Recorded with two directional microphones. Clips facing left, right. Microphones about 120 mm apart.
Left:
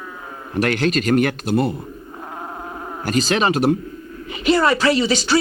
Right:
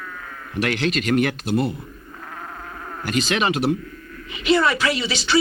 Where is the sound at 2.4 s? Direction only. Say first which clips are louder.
Left 5 dB; 25° left (ahead or behind).